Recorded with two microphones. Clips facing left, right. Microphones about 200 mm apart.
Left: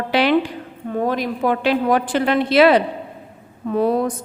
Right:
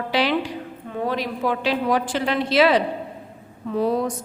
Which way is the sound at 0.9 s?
45° left (ahead or behind).